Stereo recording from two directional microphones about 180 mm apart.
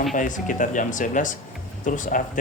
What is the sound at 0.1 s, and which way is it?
Speech, 45° left (ahead or behind).